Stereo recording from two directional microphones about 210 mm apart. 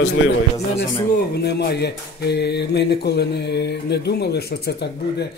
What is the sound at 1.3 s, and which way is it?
Speech, 50° left (ahead or behind).